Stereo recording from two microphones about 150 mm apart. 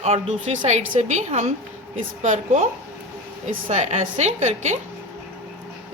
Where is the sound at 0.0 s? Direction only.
45° right (ahead or behind).